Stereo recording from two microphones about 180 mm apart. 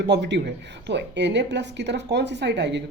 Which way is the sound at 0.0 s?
75° right (ahead or behind).